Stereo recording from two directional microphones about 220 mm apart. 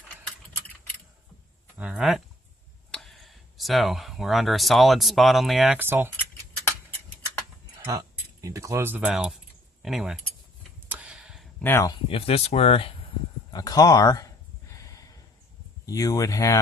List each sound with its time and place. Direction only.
1.8 s speech: 5° right (ahead or behind)
7.9 s speech: 15° right (ahead or behind)
10.8 s a sound: 5° right (ahead or behind)
11.6 s speech: 15° left (ahead or behind)
13.5 s a sound: 15° left (ahead or behind)
15.9 s speech: 15° left (ahead or behind)